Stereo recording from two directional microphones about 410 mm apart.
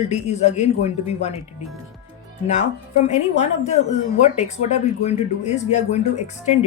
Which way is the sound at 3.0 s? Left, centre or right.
Centre.